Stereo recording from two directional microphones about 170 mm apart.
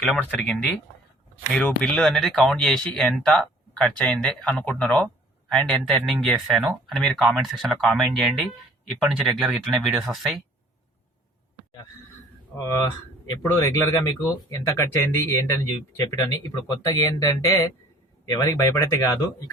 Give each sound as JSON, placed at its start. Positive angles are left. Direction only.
{"t": 0.0, "sound": "speech", "side_deg": 5}
{"t": 12.5, "sound": "speech", "side_deg": 15}
{"t": 16.0, "sound": "speech", "side_deg": 20}